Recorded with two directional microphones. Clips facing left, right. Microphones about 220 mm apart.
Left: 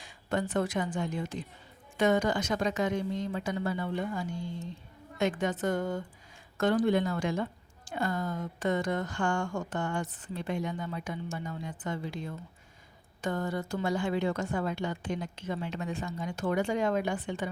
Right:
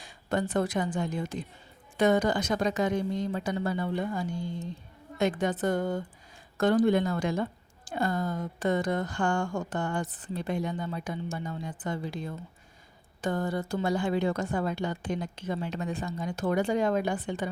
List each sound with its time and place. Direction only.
0.0 s a woman's voice: 35° right (ahead or behind)